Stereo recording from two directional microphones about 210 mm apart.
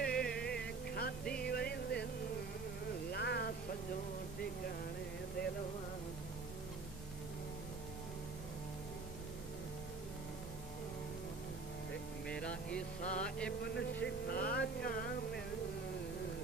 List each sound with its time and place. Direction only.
0.0 s music: 5° left (ahead or behind)
0.4 s music: 50° left (ahead or behind)
3.1 s a sound: 50° left (ahead or behind)
12.3 s music: 5° left (ahead or behind)
13.0 s music: 35° left (ahead or behind)
13.6 s speech: 50° left (ahead or behind)
14.0 s music: 45° left (ahead or behind)